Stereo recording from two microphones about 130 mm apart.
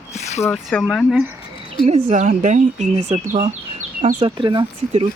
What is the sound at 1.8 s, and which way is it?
Speech, 55° right (ahead or behind).